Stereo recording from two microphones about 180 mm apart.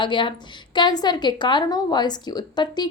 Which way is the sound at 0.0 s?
25° left (ahead or behind).